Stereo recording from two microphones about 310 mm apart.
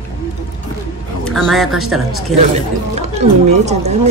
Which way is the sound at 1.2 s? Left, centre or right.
Centre.